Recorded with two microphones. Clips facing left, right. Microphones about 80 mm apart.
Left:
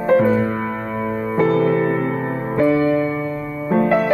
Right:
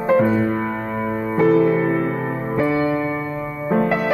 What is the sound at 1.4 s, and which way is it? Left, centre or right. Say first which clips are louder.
Music: right 1 dB; centre.